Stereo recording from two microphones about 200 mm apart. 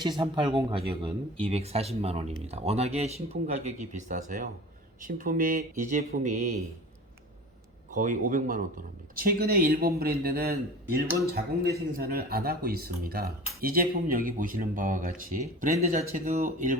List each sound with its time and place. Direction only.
0.2 s speech: 25° right (ahead or behind)
7.9 s speech: 40° right (ahead or behind)